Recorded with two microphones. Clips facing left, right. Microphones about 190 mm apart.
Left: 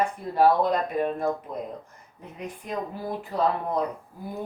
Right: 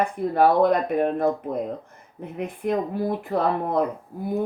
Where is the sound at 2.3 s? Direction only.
55° right (ahead or behind).